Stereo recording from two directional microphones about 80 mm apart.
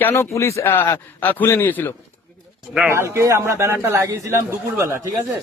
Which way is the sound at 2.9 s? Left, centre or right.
Right.